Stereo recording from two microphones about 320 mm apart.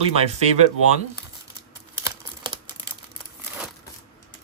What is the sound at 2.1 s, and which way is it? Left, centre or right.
Computer keyboard, centre.